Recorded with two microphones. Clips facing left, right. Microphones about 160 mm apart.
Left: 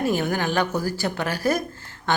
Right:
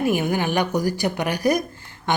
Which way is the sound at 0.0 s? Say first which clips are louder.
Right 2 dB; 15° right (ahead or behind).